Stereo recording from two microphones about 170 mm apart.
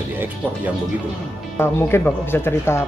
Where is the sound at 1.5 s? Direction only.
15° left (ahead or behind).